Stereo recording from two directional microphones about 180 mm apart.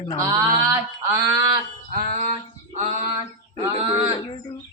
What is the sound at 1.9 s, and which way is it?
Music, 50° right (ahead or behind).